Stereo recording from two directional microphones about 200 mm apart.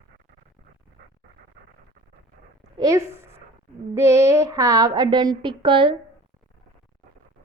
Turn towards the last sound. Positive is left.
turn(degrees=-25)  # may be behind; listen again after turning